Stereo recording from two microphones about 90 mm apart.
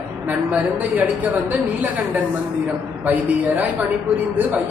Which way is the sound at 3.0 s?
20° right (ahead or behind).